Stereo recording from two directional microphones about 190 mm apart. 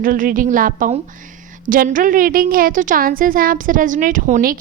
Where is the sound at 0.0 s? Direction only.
45° right (ahead or behind).